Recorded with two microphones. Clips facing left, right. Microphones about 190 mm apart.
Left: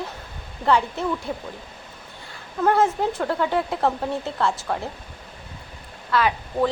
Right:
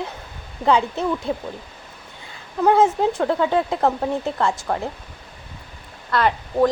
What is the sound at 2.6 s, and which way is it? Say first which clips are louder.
A woman's voice: right 3 dB; 20° right (ahead or behind).